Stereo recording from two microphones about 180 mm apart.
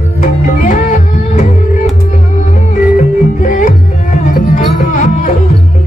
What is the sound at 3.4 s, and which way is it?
Music, 45° left (ahead or behind).